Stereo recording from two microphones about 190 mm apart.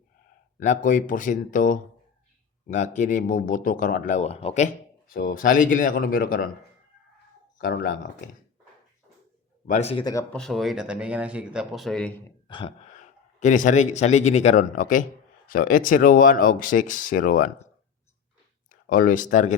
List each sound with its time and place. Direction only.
0.6 s speech: 40° left (ahead or behind)
7.7 s speech: 50° left (ahead or behind)
9.6 s speech: 35° left (ahead or behind)
10.0 s speech: 20° left (ahead or behind)
10.3 s speech: centre (ahead or behind)
12.5 s speech: 25° left (ahead or behind); by 17.5 s 45° left (ahead or behind)
18.7 s speech: 45° left (ahead or behind)